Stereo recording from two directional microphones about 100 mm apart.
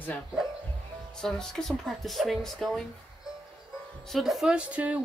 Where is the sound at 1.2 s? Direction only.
5° left (ahead or behind).